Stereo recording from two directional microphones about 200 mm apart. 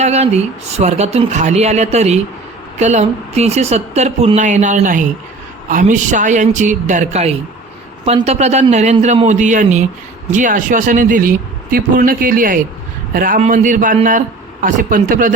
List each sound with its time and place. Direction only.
0.0 s speech: 35° right (ahead or behind)